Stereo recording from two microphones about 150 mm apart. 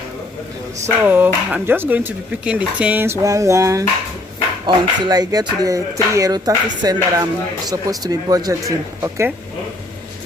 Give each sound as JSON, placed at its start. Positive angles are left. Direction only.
{"t": 1.0, "sound": "speech", "side_deg": -10}